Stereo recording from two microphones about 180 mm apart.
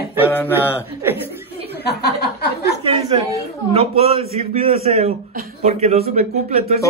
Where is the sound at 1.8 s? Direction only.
60° left (ahead or behind).